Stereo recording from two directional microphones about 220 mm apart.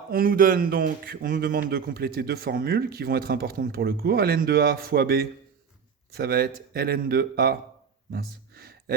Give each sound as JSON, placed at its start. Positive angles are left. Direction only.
{"t": 0.1, "sound": "a man's voice", "side_deg": -40}